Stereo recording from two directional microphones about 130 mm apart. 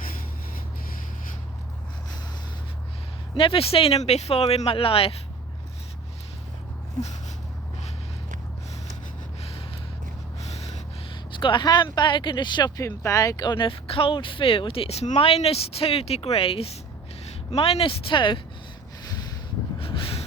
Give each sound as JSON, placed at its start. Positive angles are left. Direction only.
{"t": 0.0, "sound": "rub", "side_deg": 90}
{"t": 3.3, "sound": "speech", "side_deg": 45}
{"t": 9.4, "sound": "gasp", "side_deg": 50}
{"t": 11.1, "sound": "speech", "side_deg": 40}
{"t": 19.8, "sound": "a sound", "side_deg": 45}